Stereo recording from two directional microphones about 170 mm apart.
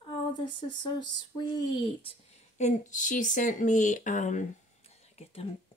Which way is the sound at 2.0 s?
40° left (ahead or behind).